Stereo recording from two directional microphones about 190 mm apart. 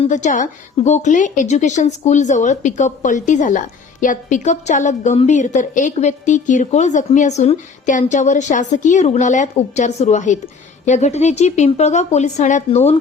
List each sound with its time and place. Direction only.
0.0 s a woman's voice: 40° left (ahead or behind)